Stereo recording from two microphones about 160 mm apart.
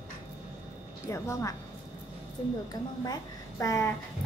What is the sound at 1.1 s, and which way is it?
Speech, 20° left (ahead or behind).